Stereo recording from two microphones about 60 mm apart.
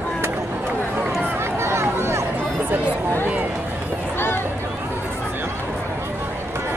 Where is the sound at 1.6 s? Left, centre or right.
Right.